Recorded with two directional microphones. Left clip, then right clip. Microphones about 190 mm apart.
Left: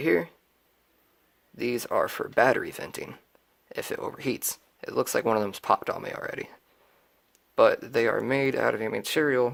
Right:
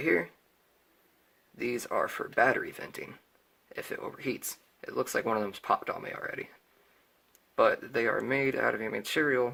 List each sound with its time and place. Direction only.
0.0 s speech: 45° left (ahead or behind)
1.5 s speech: 45° left (ahead or behind)